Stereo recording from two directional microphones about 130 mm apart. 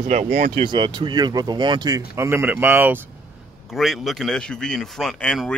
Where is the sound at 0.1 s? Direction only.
65° right (ahead or behind).